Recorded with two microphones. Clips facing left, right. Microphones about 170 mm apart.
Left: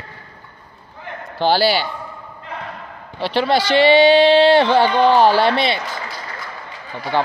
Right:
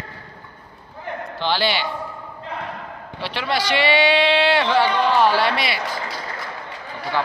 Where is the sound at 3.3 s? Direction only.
30° left (ahead or behind).